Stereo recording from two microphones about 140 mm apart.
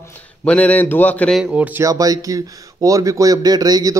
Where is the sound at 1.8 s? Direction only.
25° right (ahead or behind).